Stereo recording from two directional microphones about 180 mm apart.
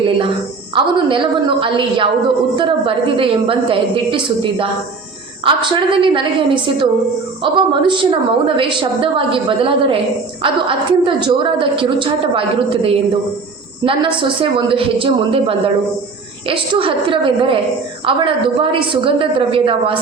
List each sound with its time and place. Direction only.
0.7 s a woman's voice: 30° right (ahead or behind)